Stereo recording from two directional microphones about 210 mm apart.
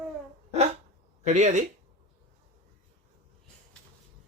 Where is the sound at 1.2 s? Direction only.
35° right (ahead or behind).